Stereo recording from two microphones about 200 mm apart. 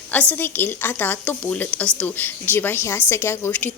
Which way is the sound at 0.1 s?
10° left (ahead or behind).